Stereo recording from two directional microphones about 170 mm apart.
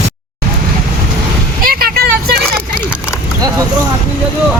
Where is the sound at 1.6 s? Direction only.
60° right (ahead or behind).